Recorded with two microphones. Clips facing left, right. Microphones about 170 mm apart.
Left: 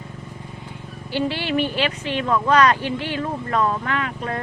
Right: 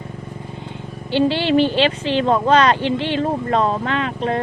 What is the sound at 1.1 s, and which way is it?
Speech, 30° right (ahead or behind).